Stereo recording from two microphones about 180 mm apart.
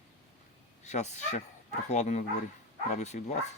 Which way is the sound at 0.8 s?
40° left (ahead or behind).